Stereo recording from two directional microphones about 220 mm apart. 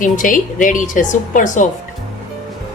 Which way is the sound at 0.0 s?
35° left (ahead or behind).